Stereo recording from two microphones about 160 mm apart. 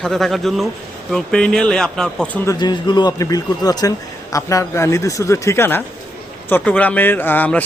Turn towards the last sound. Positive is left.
turn(degrees=10)  # may be behind; listen again after turning